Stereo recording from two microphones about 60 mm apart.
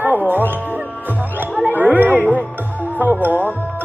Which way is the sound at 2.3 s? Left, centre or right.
Right.